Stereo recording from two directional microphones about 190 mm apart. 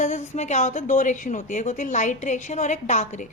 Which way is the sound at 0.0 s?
40° left (ahead or behind).